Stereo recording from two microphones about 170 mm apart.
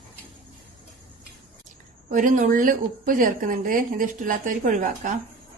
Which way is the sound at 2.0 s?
50° right (ahead or behind).